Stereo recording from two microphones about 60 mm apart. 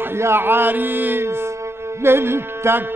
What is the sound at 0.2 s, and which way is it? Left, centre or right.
Speech, right.